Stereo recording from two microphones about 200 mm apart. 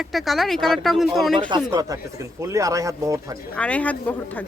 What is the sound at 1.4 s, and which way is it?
Speech, 25° right (ahead or behind).